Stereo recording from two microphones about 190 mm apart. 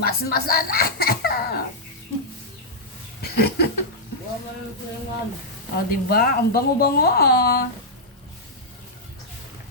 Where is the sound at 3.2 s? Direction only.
55° left (ahead or behind).